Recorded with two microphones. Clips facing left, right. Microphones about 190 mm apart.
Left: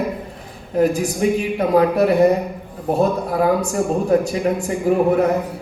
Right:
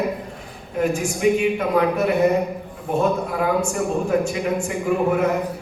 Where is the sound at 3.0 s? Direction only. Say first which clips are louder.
Left 3 dB; 35° left (ahead or behind).